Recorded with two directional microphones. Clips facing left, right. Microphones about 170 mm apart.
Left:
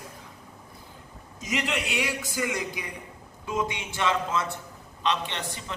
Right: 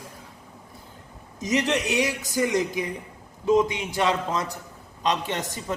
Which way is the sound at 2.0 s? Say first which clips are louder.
Right 5 dB; 20° right (ahead or behind).